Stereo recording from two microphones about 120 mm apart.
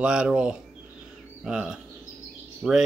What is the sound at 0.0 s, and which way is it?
Speech, 5° right (ahead or behind).